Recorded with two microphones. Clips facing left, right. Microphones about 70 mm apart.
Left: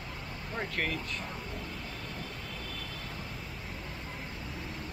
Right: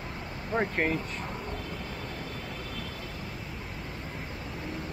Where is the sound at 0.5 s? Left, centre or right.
Right.